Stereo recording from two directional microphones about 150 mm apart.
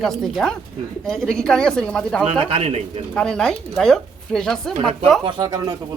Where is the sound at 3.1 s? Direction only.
5° left (ahead or behind).